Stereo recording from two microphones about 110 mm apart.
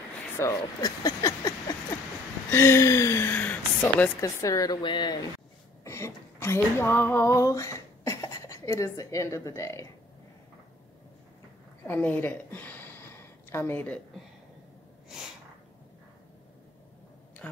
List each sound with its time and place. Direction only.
0.4 s speech: 30° left (ahead or behind)
2.5 s speech: 25° left (ahead or behind)
4.2 s speech: 30° left (ahead or behind)
4.8 s speech: 45° left (ahead or behind)
5.9 s speech: 25° left (ahead or behind)
11.9 s a sound: 15° left (ahead or behind)